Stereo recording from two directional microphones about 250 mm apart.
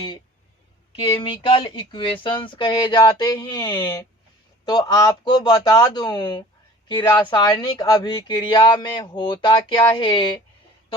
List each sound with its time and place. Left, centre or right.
0.9 s speech: left